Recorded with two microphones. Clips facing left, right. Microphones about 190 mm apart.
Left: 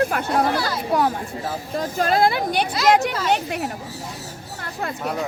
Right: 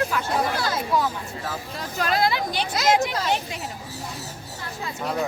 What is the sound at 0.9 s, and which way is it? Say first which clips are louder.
Speech: left 4 dB; 65° left (ahead or behind).